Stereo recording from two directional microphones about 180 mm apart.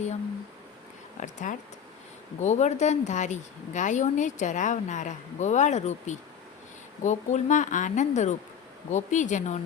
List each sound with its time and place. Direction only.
1.2 s a woman's voice: 40° left (ahead or behind)